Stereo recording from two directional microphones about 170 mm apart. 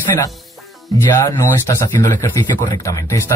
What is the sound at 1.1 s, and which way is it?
A man's voice, 15° left (ahead or behind).